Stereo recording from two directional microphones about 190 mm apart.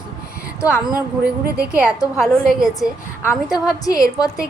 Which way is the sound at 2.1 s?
Centre (ahead or behind).